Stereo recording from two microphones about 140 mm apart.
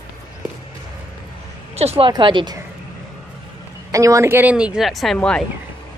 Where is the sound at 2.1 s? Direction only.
35° right (ahead or behind).